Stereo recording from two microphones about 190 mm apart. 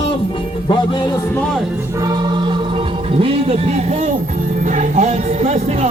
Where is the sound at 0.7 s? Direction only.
25° left (ahead or behind).